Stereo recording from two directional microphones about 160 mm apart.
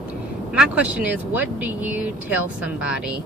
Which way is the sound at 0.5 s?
10° right (ahead or behind).